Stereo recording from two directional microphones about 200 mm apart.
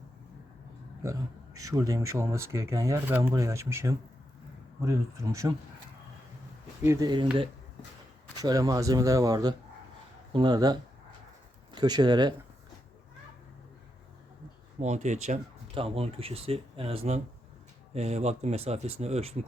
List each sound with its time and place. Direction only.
1.0 s speech: 15° right (ahead or behind)
6.8 s speech: 15° right (ahead or behind)
8.4 s speech: 15° right (ahead or behind)
14.8 s speech: 35° right (ahead or behind)